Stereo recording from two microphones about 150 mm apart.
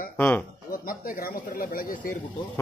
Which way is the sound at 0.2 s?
10° left (ahead or behind).